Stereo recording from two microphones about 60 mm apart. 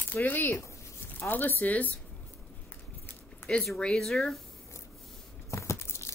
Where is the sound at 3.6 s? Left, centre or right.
Centre.